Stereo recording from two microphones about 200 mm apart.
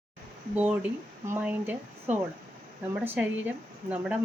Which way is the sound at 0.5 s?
5° right (ahead or behind).